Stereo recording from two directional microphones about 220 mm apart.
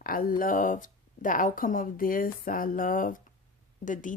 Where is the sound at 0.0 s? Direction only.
40° left (ahead or behind).